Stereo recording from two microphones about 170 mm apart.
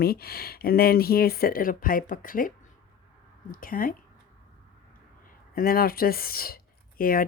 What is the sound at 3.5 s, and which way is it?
Speech, 55° left (ahead or behind).